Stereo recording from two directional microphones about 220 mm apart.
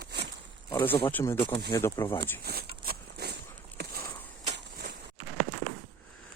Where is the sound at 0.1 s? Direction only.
50° right (ahead or behind).